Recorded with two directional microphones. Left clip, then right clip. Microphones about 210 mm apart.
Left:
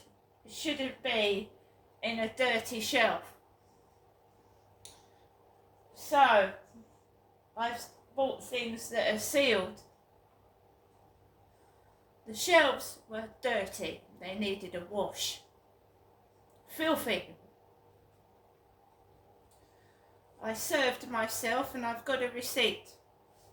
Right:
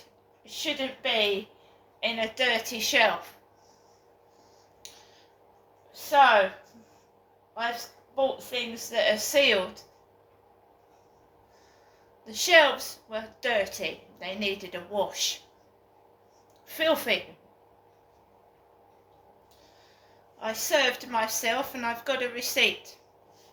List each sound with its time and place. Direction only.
0.4 s a woman's voice: 10° left (ahead or behind)
6.1 s a woman's voice: 10° left (ahead or behind)
8.1 s a woman's voice: 10° left (ahead or behind)
12.2 s a woman's voice: 15° left (ahead or behind)
16.6 s a woman's voice: 15° left (ahead or behind)
20.4 s a woman's voice: 15° left (ahead or behind)